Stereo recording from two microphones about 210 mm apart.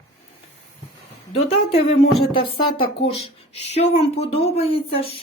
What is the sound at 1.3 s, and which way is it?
Speech, 30° left (ahead or behind).